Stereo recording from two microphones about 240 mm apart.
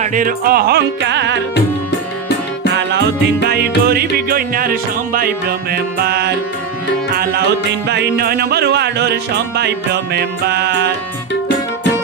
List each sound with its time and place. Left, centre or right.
0.0 s music: right
2.7 s music: right